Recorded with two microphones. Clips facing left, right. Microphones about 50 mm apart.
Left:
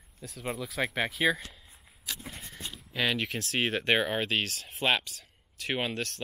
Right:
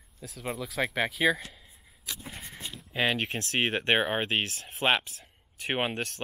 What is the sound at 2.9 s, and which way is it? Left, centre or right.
Speech, right.